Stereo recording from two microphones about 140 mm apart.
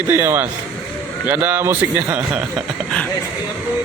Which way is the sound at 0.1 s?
15° right (ahead or behind).